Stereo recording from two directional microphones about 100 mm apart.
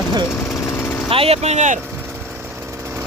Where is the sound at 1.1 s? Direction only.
80° right.